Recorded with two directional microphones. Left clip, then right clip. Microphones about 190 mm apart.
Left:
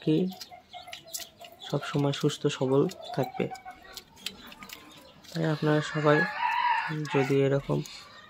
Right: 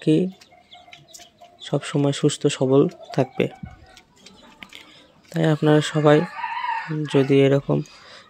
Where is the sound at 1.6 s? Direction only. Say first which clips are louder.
Right 7 dB; 35° right (ahead or behind).